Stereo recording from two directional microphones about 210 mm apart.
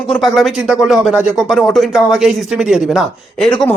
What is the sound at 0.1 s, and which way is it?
Speech, centre (ahead or behind).